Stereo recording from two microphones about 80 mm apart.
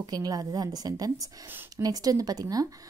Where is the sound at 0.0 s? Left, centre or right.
Right.